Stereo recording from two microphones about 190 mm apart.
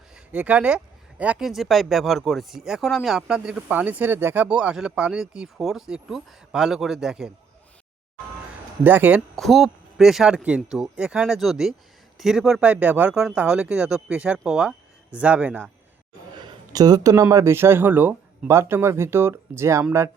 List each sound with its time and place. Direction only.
0.3 s speech: 10° right (ahead or behind)
8.8 s speech: 10° right (ahead or behind)
9.3 s speech: centre (ahead or behind)
16.3 s speech: 20° right (ahead or behind)